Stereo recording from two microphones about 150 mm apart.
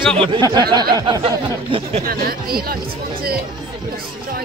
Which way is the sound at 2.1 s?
85° right.